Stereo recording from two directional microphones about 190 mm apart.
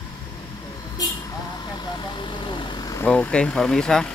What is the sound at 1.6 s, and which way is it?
Vehicle, 20° left (ahead or behind).